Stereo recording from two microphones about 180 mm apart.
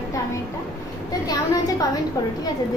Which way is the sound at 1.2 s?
20° left (ahead or behind).